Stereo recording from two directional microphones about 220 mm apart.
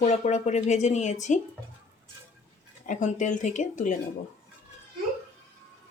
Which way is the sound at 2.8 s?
35° left (ahead or behind).